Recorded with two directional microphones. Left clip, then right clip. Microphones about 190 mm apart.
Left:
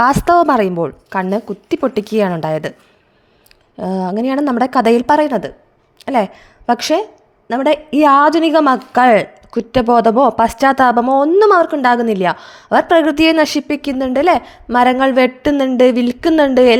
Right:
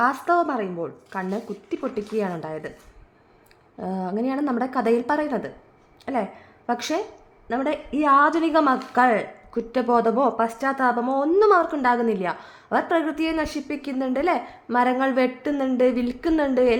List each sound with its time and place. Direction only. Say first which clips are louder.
0.0 s a woman's voice: left 10 dB; 50° left (ahead or behind)
3.8 s a woman's voice: left 9 dB; 40° left (ahead or behind)